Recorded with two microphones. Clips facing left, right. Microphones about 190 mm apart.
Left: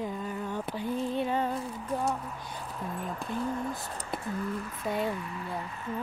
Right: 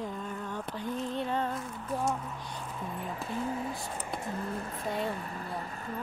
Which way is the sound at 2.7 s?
Centre (ahead or behind).